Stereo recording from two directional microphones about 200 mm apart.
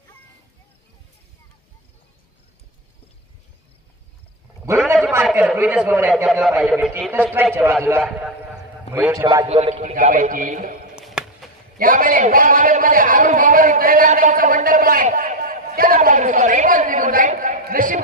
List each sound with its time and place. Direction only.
4.6 s a sound: 10° right (ahead or behind)
4.9 s a man's voice: 5° right (ahead or behind)
8.9 s a man's voice: 10° right (ahead or behind)
9.5 s a man's voice: 30° right (ahead or behind)
11.0 s chop: 5° right (ahead or behind)
11.8 s a man's voice: 45° right (ahead or behind)